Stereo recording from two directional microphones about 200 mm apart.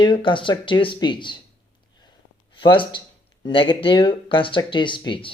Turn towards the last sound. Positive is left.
turn(degrees=25)  # may be behind; listen again after turning